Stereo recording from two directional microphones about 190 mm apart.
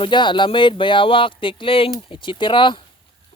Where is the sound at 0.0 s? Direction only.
25° left (ahead or behind).